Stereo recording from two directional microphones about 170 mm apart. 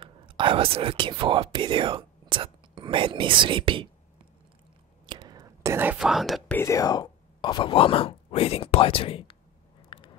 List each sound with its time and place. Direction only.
0.0 s speech: 30° right (ahead or behind)
5.0 s whispering: 25° right (ahead or behind); by 6.4 s centre (ahead or behind)
6.5 s speech: 15° left (ahead or behind); by 9.4 s 35° left (ahead or behind)
9.8 s a sound: 30° left (ahead or behind)